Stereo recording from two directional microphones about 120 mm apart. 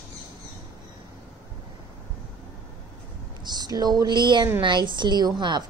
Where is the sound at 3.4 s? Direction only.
35° right (ahead or behind).